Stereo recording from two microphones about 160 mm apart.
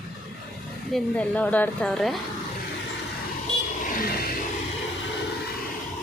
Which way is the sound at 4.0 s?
70° left (ahead or behind).